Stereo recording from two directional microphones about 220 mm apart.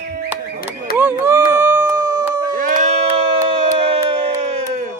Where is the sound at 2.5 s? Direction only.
35° right (ahead or behind).